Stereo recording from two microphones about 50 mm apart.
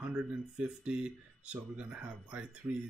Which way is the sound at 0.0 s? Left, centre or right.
Centre.